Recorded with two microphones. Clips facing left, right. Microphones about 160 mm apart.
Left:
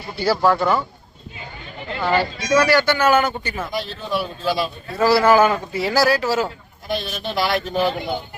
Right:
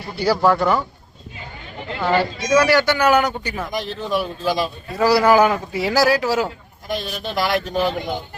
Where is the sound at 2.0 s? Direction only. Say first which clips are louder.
Right 1 dB; centre (ahead or behind).